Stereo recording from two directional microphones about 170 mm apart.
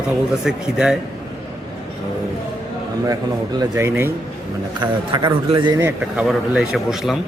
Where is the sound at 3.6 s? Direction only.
15° right (ahead or behind).